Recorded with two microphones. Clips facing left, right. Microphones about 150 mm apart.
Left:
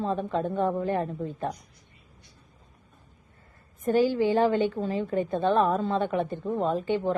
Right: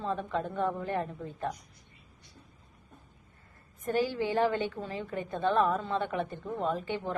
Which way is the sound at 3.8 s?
30° left (ahead or behind).